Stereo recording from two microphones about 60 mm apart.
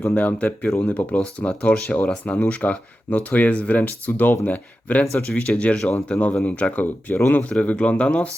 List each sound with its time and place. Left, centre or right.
0.1 s speech: left